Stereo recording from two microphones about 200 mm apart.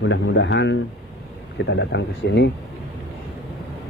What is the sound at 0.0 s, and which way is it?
A man's voice, 65° left (ahead or behind).